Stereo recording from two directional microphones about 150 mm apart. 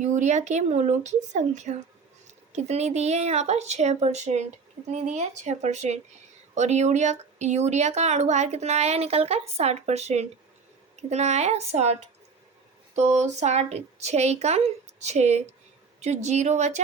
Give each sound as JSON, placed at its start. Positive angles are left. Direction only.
{"t": 0.0, "sound": "speech", "side_deg": -55}
{"t": 13.0, "sound": "speech", "side_deg": -50}